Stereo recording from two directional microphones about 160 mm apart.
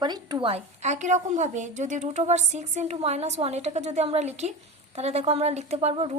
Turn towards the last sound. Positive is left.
turn(degrees=-40)  # may be behind; listen again after turning